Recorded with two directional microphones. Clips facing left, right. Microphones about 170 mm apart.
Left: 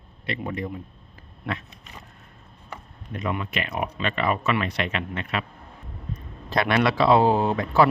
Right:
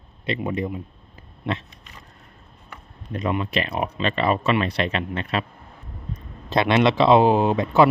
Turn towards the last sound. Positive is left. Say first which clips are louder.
# right 3 dB
turn(degrees=-20)  # may be behind; listen again after turning